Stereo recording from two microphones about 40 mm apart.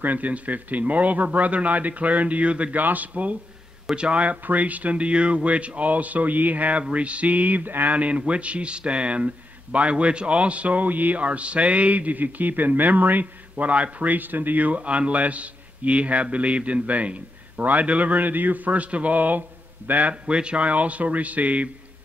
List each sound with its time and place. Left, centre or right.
0.0 s a man's voice: right
2.8 s speech: right
3.9 s a man's voice: right
7.9 s a man's voice: right
20.2 s a man's voice: right